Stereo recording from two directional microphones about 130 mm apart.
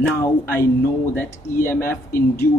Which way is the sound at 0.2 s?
20° left (ahead or behind).